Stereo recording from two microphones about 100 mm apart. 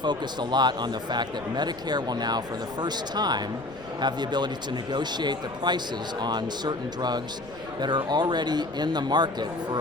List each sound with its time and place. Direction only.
0.0 s speech: 45° right (ahead or behind)